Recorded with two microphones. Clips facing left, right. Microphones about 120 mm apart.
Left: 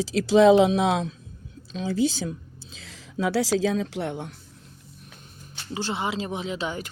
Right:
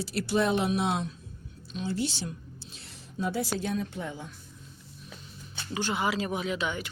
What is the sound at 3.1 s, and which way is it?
Speech, 90° left.